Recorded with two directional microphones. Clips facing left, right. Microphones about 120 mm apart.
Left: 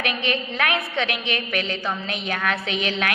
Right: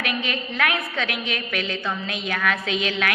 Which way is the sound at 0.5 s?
25° left (ahead or behind).